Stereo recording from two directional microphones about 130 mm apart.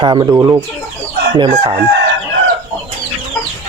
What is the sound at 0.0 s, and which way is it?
Speech, 35° right (ahead or behind).